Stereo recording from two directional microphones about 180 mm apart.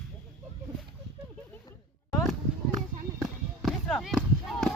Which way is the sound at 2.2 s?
Centre (ahead or behind).